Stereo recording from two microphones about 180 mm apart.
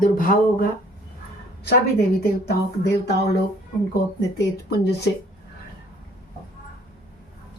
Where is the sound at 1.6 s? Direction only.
60° left (ahead or behind).